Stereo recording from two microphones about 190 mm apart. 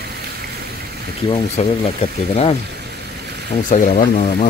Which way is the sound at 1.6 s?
35° left (ahead or behind).